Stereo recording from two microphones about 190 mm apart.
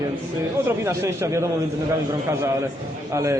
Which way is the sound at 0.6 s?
15° right (ahead or behind).